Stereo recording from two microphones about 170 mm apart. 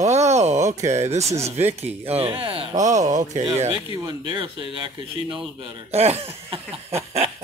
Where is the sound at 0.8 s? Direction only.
40° right (ahead or behind).